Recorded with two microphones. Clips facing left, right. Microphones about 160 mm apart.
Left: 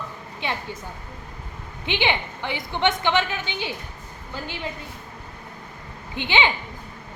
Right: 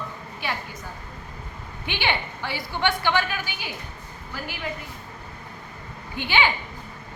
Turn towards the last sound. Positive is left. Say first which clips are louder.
# left 1 dB
turn(degrees=20)  # may be behind; listen again after turning